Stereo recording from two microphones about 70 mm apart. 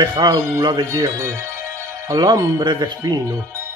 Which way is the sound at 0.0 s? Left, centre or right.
Right.